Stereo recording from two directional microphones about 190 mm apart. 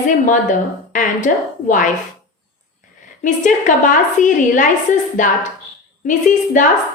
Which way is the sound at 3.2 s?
40° left (ahead or behind).